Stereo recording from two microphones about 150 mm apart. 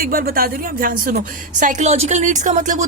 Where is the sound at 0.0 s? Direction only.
75° right (ahead or behind).